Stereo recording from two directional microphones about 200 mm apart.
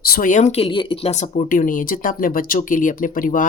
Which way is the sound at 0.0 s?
45° left (ahead or behind).